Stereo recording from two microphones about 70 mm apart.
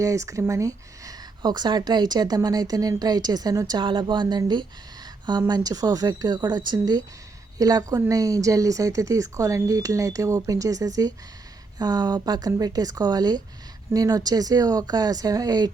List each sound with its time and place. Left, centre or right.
0.0 s speech: right
1.4 s speech: right
3.7 s a woman's voice: right
7.6 s speech: right
11.8 s speech: right
13.9 s speech: right